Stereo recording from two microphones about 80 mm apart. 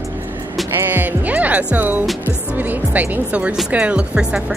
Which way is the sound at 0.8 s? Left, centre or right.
Right.